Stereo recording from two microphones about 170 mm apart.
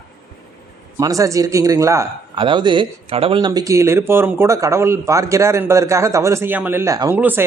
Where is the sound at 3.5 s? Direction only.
20° right (ahead or behind).